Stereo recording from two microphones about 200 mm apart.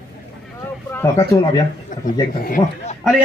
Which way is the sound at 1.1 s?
20° left (ahead or behind).